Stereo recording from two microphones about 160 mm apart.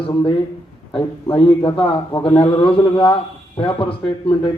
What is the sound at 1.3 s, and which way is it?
A man's voice, 35° left (ahead or behind).